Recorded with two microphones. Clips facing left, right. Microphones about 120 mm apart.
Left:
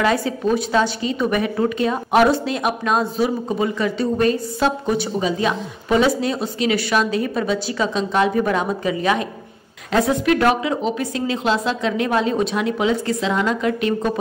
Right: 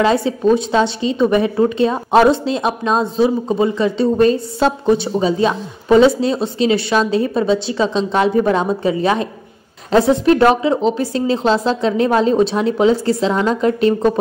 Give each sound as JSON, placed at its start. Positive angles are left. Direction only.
{"t": 0.0, "sound": "a woman's voice", "side_deg": -25}